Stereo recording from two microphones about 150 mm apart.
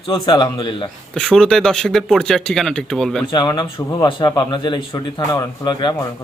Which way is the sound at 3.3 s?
30° left (ahead or behind).